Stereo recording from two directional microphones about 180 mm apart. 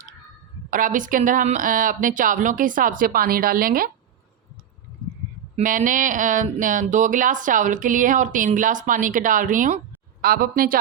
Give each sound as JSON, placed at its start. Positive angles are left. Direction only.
{"t": 0.7, "sound": "speech", "side_deg": -50}
{"t": 5.5, "sound": "speech", "side_deg": -45}